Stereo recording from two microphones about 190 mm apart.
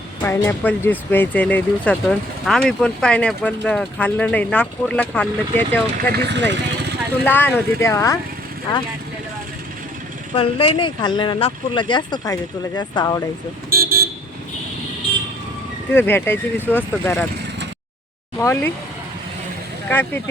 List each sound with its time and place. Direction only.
0.2 s speech: 10° left (ahead or behind)
6.1 s speech: 65° right (ahead or behind)
7.3 s speech: 10° left (ahead or behind)
10.3 s speech: 30° left (ahead or behind)
13.7 s vehicle: 50° right (ahead or behind)
15.9 s speech: 10° left (ahead or behind)
18.3 s speech: 10° left (ahead or behind)
19.9 s speech: 10° left (ahead or behind)